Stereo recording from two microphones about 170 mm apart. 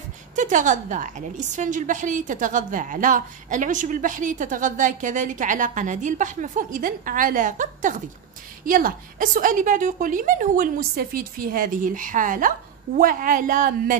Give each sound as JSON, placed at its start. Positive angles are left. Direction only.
{"t": 0.4, "sound": "a woman's voice", "side_deg": -50}